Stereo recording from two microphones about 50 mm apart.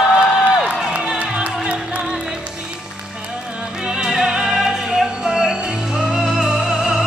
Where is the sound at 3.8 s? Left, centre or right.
Centre.